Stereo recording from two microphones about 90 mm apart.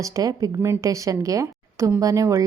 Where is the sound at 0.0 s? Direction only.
40° right (ahead or behind).